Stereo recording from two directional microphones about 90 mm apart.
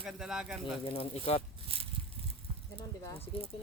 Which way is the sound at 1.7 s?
90° right.